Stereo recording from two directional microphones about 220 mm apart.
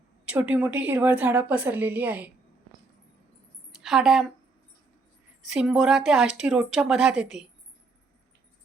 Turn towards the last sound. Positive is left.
turn(degrees=-5)  # may be behind; listen again after turning